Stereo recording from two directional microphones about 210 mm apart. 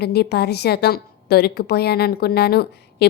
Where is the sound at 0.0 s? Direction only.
50° left (ahead or behind).